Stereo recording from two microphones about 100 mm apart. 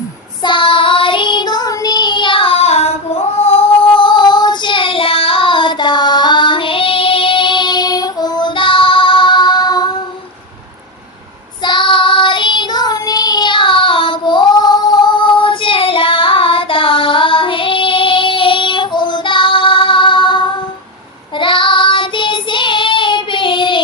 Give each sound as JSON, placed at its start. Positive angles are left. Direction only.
{"t": 0.4, "sound": "child singing", "side_deg": 55}
{"t": 3.3, "sound": "female singing", "side_deg": 90}
{"t": 3.9, "sound": "child singing", "side_deg": 50}
{"t": 11.6, "sound": "child singing", "side_deg": 50}